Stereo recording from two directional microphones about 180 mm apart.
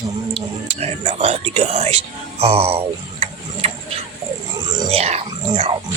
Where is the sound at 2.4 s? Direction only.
35° right (ahead or behind).